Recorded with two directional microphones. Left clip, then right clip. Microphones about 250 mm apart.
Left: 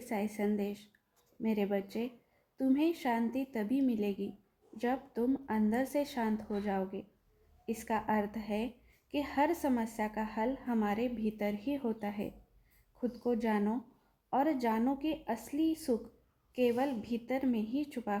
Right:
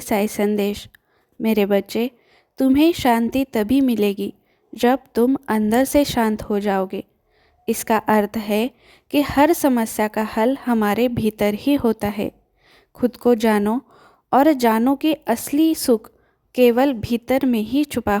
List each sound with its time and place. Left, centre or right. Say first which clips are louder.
0.0 s a woman's voice: right 16 dB; right